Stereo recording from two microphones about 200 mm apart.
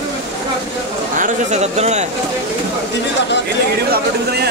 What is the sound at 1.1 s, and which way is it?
Speech, 40° right (ahead or behind).